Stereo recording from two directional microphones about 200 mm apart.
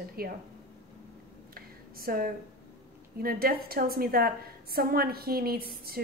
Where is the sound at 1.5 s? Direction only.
50° right (ahead or behind).